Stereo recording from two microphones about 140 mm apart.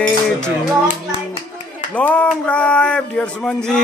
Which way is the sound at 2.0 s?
10° left (ahead or behind).